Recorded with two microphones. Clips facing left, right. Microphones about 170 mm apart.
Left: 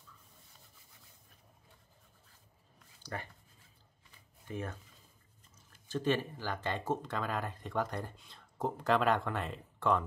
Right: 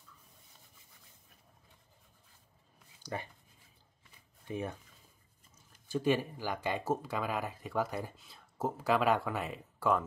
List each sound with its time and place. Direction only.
3.0 s a sound: 15° right (ahead or behind)
4.5 s speech: 15° right (ahead or behind)
5.9 s speech: 10° right (ahead or behind)